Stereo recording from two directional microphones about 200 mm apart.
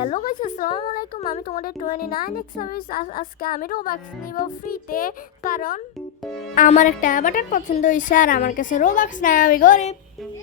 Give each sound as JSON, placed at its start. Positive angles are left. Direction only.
{"t": 0.0, "sound": "a sound", "side_deg": 35}
{"t": 0.7, "sound": "speech", "side_deg": 30}
{"t": 0.9, "sound": "a woman's voice", "side_deg": 45}